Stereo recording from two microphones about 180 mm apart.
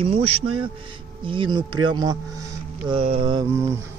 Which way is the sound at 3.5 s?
15° right (ahead or behind).